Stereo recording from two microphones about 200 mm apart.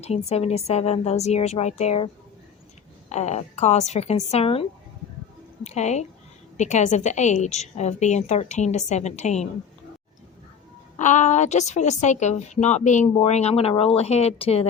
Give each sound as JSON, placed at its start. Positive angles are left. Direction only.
{"t": 0.0, "sound": "a woman's voice", "side_deg": 30}
{"t": 3.1, "sound": "a woman's voice", "side_deg": 35}
{"t": 5.6, "sound": "a woman's voice", "side_deg": 35}
{"t": 10.9, "sound": "a woman's voice", "side_deg": 35}